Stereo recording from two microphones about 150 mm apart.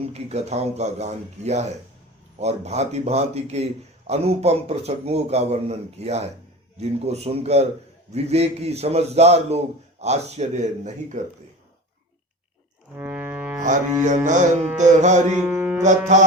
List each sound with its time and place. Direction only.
0.1 s a man's voice: 45° right (ahead or behind)
13.0 s music: 15° right (ahead or behind)
14.0 s a man's voice: 55° right (ahead or behind)
15.4 s a sound: 15° right (ahead or behind)
15.8 s a man's voice: 55° right (ahead or behind)